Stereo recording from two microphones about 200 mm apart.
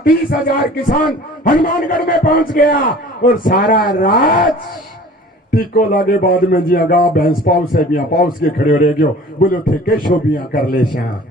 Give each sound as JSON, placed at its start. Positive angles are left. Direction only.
{"t": 0.3, "sound": "a man's voice", "side_deg": 45}
{"t": 5.5, "sound": "a man's voice", "side_deg": 45}